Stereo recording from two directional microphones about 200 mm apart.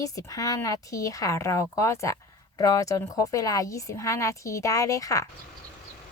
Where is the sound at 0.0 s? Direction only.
15° left (ahead or behind).